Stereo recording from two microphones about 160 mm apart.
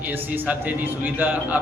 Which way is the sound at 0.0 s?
10° right (ahead or behind).